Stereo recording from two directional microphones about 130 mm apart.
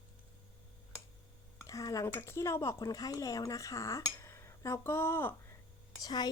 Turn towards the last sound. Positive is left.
turn(degrees=30)  # may be behind; listen again after turning